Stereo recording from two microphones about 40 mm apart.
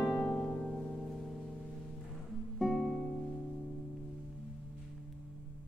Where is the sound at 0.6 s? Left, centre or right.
Centre.